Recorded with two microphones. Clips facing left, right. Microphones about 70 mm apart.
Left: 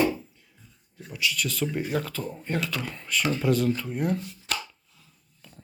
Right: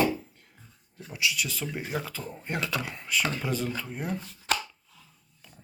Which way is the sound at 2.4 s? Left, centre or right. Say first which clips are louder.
Even; centre.